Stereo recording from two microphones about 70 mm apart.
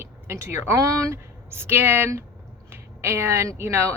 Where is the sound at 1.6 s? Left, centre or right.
Right.